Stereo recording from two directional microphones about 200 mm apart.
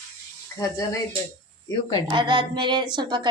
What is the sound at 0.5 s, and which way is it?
Speech, 15° left (ahead or behind).